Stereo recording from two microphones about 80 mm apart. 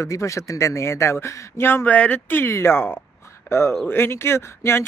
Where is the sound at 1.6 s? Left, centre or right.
Left.